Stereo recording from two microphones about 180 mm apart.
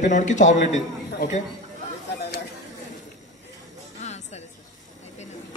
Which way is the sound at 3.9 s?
40° left (ahead or behind).